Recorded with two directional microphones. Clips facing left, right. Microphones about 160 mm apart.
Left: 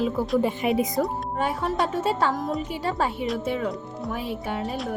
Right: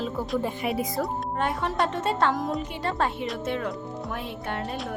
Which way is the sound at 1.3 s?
5° left (ahead or behind).